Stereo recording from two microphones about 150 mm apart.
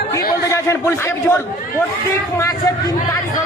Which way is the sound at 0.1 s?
20° left (ahead or behind).